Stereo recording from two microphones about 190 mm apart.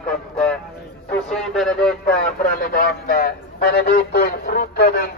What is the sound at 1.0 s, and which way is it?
A man's voice, 5° left (ahead or behind).